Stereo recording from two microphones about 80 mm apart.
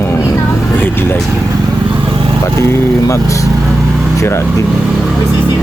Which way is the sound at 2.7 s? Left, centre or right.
Left.